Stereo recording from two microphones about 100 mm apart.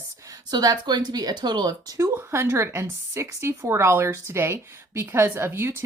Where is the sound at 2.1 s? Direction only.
25° right (ahead or behind).